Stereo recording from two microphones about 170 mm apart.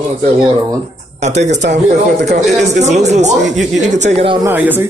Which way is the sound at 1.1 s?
40° right (ahead or behind).